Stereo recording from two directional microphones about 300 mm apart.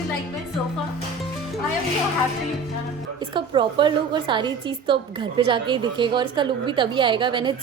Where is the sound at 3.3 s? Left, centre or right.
Centre.